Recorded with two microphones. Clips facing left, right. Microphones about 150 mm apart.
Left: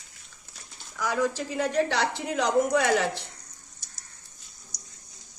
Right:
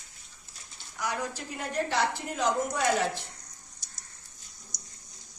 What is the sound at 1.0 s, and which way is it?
A woman's voice, 90° left.